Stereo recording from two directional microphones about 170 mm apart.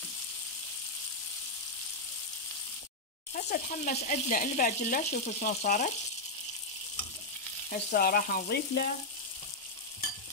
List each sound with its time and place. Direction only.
3.3 s speech: 40° left (ahead or behind)
7.9 s frying: 60° left (ahead or behind)